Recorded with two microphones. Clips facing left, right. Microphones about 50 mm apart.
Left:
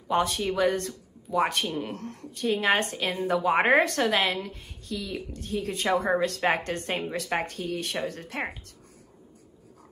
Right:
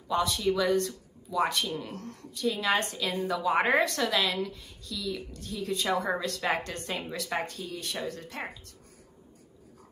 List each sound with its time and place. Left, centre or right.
0.1 s speech: left